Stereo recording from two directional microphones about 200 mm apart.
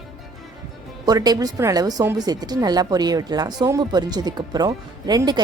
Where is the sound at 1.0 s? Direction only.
20° right (ahead or behind).